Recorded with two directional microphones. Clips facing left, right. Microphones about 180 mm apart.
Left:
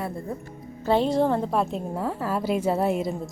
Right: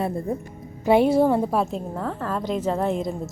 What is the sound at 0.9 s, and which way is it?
Speech, 10° right (ahead or behind).